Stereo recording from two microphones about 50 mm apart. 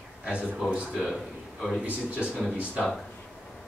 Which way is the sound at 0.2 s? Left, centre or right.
Right.